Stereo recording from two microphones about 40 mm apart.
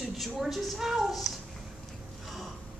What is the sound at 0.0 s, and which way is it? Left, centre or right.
A woman's voice, centre.